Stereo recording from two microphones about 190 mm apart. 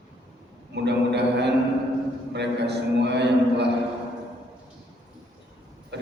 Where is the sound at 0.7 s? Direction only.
65° right (ahead or behind).